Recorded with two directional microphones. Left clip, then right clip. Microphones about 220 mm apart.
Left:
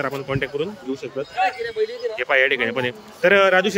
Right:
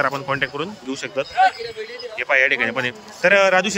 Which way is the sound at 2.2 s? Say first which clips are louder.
Right 1 dB; 10° left (ahead or behind).